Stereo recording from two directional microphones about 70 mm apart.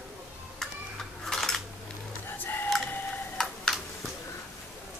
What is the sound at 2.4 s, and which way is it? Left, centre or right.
Printer, left.